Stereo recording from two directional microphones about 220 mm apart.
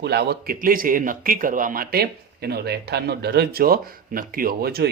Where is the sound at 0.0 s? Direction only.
45° right (ahead or behind).